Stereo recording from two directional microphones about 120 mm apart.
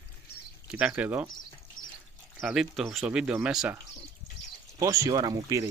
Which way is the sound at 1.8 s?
35° left (ahead or behind).